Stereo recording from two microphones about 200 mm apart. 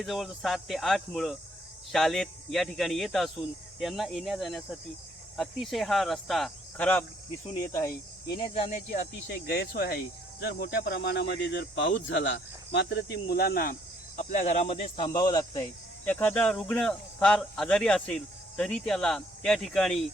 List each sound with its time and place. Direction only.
0.0 s speech: centre (ahead or behind)
8.7 s speech: 45° left (ahead or behind)
14.2 s speech: 35° left (ahead or behind); by 15.6 s 20° left (ahead or behind)
16.0 s speech: 10° left (ahead or behind)